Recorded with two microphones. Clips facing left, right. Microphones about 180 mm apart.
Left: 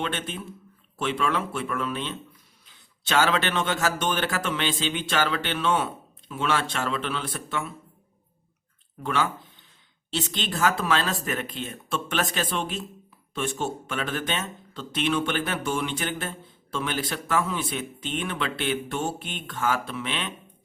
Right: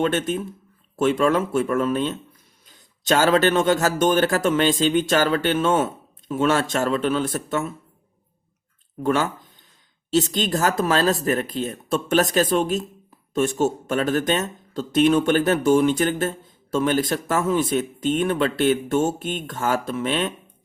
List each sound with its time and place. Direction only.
0.0 s a man's voice: 45° right (ahead or behind)
9.0 s a man's voice: 45° right (ahead or behind)